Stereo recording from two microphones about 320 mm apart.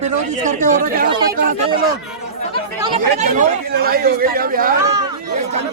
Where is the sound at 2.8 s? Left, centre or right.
Right.